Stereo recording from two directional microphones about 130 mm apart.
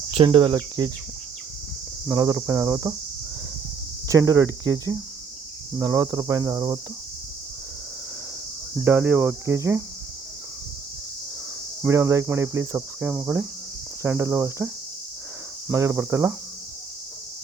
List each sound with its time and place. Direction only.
0.3 s cricket: 35° right (ahead or behind)
2.0 s speech: 20° right (ahead or behind)
4.1 s speech: 25° right (ahead or behind)
8.8 s cricket: 15° right (ahead or behind)
11.8 s speech: 20° right (ahead or behind)
13.0 s cricket: 10° right (ahead or behind)
15.7 s speech: 15° right (ahead or behind)